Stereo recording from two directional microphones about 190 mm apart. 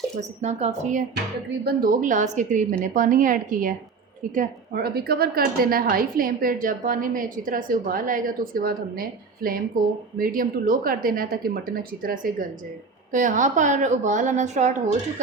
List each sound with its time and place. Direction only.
0.2 s a woman's voice: 35° right (ahead or behind)